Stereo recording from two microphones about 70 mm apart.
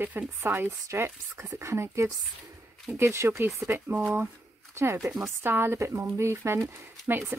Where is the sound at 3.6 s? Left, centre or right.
Right.